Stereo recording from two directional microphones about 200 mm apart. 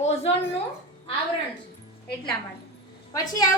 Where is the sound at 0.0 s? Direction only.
30° left (ahead or behind).